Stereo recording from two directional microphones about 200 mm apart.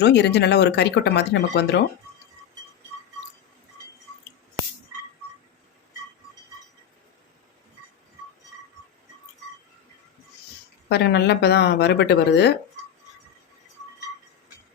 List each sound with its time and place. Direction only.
0.0 s speech: 60° left (ahead or behind)
10.8 s speech: 55° left (ahead or behind)